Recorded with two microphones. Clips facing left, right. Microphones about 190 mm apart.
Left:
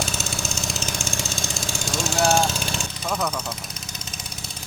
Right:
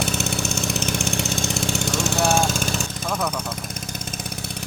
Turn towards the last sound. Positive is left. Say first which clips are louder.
# even
turn(degrees=-5)  # may be behind; listen again after turning